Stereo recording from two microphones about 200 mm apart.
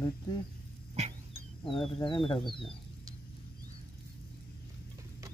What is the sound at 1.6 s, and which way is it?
Speech, 25° left (ahead or behind).